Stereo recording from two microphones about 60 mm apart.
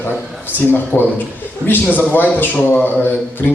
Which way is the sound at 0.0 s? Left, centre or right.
Left.